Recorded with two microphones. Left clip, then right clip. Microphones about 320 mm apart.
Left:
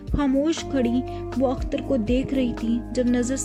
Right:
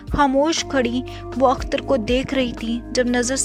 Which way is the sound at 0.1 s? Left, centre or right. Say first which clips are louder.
Right 6 dB; centre.